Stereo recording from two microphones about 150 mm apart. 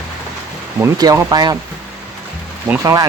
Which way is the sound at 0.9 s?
25° right (ahead or behind).